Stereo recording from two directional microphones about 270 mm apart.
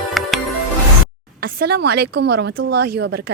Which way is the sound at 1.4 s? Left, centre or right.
Right.